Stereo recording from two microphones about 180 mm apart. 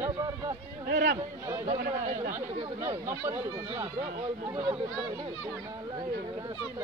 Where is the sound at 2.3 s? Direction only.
15° right (ahead or behind).